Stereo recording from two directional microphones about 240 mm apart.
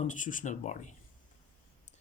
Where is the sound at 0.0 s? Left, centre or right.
Left.